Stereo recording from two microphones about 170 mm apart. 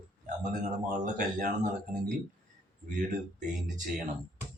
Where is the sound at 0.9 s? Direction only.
45° right (ahead or behind).